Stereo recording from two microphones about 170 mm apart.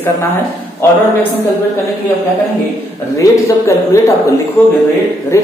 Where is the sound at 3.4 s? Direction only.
15° left (ahead or behind).